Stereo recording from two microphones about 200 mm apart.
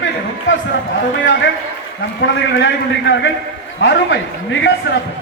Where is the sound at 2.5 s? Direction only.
70° left (ahead or behind).